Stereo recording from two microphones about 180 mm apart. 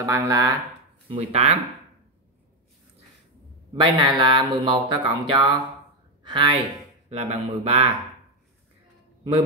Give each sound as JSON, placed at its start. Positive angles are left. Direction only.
{"t": 0.0, "sound": "speech", "side_deg": -15}
{"t": 1.0, "sound": "speech", "side_deg": -30}
{"t": 3.7, "sound": "a man's voice", "side_deg": -25}